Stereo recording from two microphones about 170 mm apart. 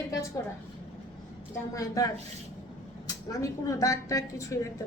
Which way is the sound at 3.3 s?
20° left (ahead or behind).